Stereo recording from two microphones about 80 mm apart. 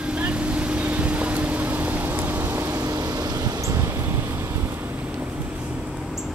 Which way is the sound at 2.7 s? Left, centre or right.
Right.